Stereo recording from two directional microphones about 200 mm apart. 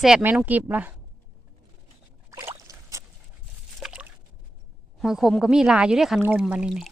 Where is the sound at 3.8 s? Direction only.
5° right (ahead or behind).